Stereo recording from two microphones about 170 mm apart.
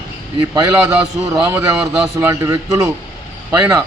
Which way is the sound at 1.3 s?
15° right (ahead or behind).